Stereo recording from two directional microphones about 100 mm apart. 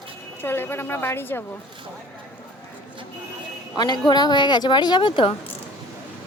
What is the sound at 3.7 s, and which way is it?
Speech, 45° left (ahead or behind).